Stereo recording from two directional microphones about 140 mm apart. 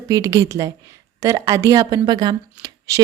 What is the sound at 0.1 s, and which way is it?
Speech, 25° right (ahead or behind).